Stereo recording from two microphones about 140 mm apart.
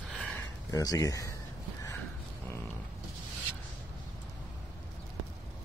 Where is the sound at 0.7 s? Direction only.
25° left (ahead or behind).